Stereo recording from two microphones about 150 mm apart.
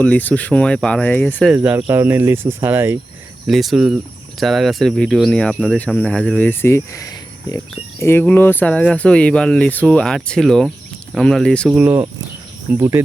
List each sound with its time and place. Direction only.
0.0 s speech: 10° left (ahead or behind)
1.5 s speech: 15° right (ahead or behind)
3.4 s speech: centre (ahead or behind)
11.7 s speech: 15° right (ahead or behind)